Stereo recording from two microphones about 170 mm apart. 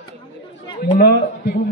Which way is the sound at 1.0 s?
70° left (ahead or behind).